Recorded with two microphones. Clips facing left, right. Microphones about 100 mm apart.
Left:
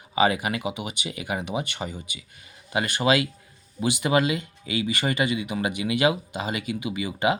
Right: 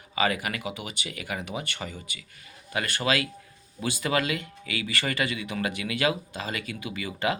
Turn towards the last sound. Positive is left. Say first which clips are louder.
# left 4 dB
turn(degrees=20)  # may be behind; listen again after turning